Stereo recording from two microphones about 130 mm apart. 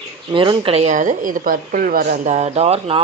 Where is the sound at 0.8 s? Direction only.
70° right (ahead or behind).